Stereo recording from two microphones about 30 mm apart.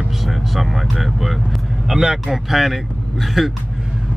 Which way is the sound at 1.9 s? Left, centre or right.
Centre.